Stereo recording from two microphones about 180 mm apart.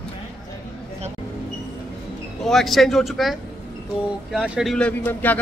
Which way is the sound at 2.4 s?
Centre (ahead or behind).